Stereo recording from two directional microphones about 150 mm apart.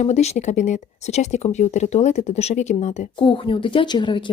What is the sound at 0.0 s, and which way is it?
Speech, 45° left (ahead or behind).